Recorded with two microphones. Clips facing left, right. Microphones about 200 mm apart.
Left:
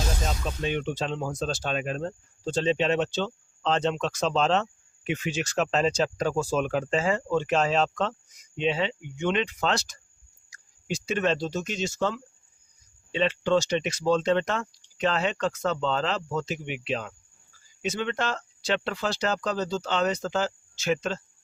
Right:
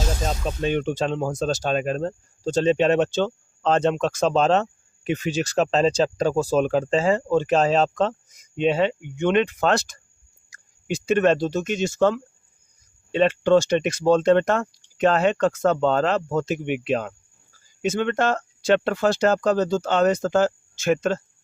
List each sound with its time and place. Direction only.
0.3 s speech: 45° right (ahead or behind)
8.5 s speech: 50° right (ahead or behind)